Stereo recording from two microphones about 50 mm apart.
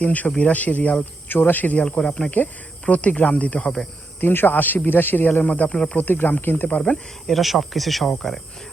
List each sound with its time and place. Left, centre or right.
0.0 s speech: left
1.3 s speech: left
1.8 s speech: centre
2.3 s speech: left
4.2 s speech: left
5.5 s speech: left
5.7 s speech: centre
6.0 s speech: left
6.7 s speech: left
6.9 s speech: centre